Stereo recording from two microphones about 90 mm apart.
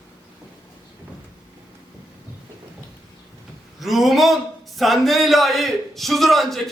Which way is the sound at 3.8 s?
Centre (ahead or behind).